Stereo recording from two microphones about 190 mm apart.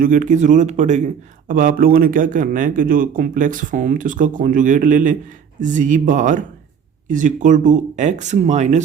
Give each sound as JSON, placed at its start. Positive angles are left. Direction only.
{"t": 0.0, "sound": "a man's voice", "side_deg": -45}